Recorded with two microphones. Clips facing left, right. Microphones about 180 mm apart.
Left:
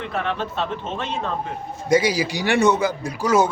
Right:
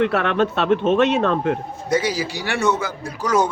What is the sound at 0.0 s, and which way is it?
Speech, 70° right (ahead or behind).